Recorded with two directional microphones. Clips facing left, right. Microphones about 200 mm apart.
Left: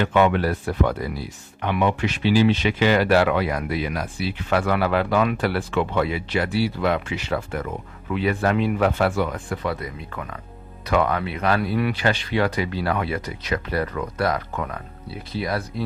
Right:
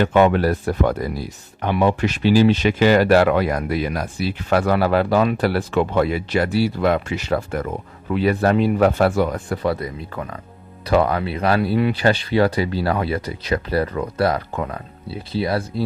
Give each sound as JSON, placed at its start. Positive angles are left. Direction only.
{"t": 0.0, "sound": "speech", "side_deg": -40}